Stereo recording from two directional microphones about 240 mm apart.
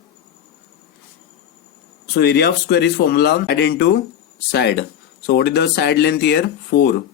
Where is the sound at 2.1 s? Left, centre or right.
Left.